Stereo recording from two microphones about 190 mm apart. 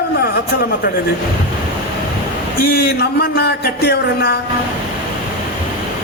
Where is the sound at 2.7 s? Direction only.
55° left (ahead or behind).